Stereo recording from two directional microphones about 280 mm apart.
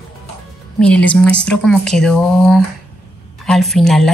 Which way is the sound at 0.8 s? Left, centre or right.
Centre.